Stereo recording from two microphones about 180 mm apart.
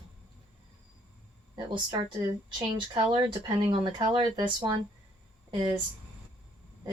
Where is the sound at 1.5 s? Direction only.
25° right (ahead or behind).